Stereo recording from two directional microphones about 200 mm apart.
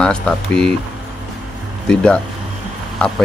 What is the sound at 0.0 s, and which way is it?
Speech, 5° left (ahead or behind).